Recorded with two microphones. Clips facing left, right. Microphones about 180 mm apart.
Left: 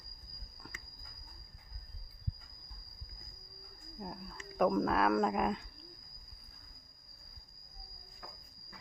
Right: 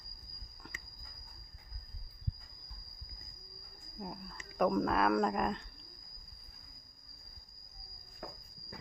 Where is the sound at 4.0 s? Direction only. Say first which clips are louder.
Even; centre (ahead or behind).